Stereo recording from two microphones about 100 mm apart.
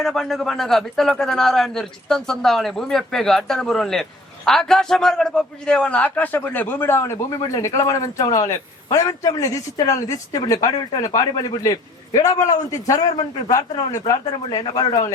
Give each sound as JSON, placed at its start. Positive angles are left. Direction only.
{"t": 0.0, "sound": "a man's voice", "side_deg": 5}
{"t": 10.7, "sound": "speech", "side_deg": 50}
{"t": 11.0, "sound": "a man's voice", "side_deg": 35}
{"t": 14.1, "sound": "speech", "side_deg": 45}